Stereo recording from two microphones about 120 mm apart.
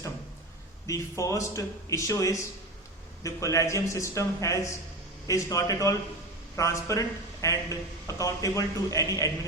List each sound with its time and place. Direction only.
0.9 s a man's voice: 25° left (ahead or behind)